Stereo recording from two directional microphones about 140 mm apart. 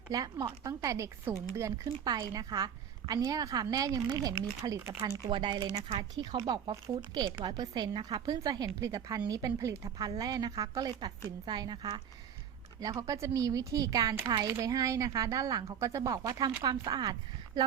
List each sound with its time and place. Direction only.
0.1 s a woman's voice: 25° right (ahead or behind)